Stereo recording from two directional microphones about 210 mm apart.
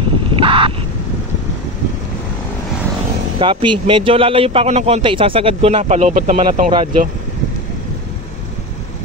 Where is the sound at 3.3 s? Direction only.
25° right (ahead or behind).